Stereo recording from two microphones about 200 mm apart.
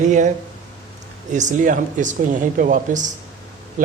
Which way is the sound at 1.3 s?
40° right (ahead or behind).